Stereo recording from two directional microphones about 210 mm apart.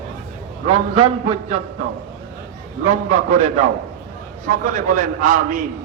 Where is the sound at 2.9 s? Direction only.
35° right (ahead or behind).